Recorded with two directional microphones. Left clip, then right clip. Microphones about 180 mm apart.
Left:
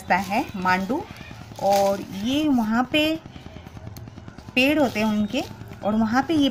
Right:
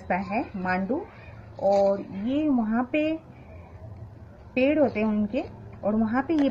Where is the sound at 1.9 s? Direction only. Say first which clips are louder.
Left 2 dB; 25° left (ahead or behind).